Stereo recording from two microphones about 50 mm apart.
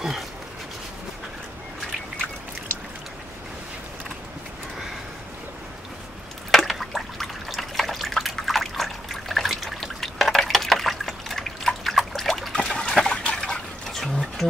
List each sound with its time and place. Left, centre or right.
6.5 s liquid: centre
12.2 s trickle: centre
12.5 s a sound: centre